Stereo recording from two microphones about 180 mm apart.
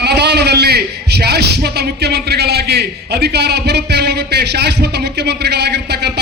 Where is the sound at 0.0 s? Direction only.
70° right (ahead or behind).